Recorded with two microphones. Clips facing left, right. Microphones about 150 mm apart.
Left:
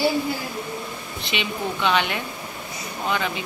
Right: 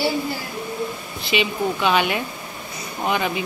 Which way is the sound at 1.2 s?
5° right (ahead or behind).